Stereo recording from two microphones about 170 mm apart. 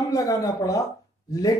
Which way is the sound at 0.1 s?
20° left (ahead or behind).